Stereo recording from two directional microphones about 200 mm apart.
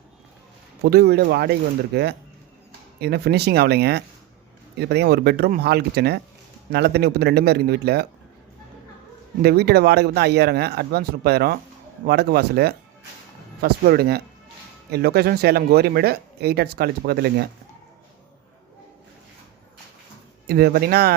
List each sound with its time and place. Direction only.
0.8 s speech: 55° right (ahead or behind)
9.4 s speech: 50° right (ahead or behind)
20.5 s speech: 50° right (ahead or behind)